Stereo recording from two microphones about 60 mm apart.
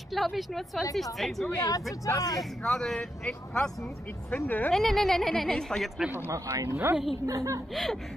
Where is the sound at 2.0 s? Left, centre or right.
Left.